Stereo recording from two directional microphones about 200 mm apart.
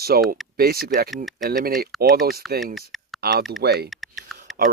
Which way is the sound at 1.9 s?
Centre (ahead or behind).